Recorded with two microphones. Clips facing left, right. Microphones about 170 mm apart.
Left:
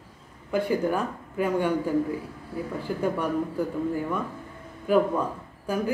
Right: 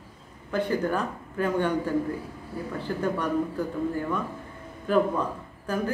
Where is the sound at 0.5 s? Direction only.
10° left (ahead or behind).